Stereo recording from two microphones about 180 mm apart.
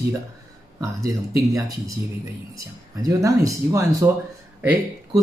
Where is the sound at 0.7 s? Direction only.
15° right (ahead or behind).